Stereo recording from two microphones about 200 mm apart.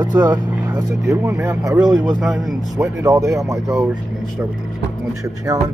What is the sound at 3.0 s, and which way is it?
Speech, 15° right (ahead or behind).